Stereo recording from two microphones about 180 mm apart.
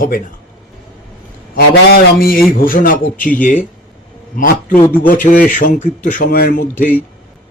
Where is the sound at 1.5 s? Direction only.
55° left (ahead or behind).